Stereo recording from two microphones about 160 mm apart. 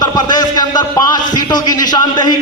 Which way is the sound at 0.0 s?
25° left (ahead or behind).